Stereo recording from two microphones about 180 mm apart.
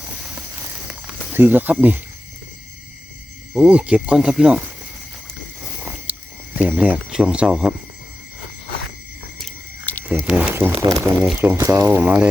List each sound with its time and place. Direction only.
1.3 s speech: 10° right (ahead or behind)
3.5 s speech: 5° right (ahead or behind)
6.6 s speech: 5° right (ahead or behind)
9.4 s biting: 10° left (ahead or behind)
10.1 s speech: 5° right (ahead or behind)
11.9 s speech: 5° right (ahead or behind)